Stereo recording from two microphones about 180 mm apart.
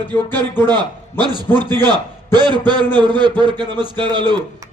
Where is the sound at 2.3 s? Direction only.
25° right (ahead or behind).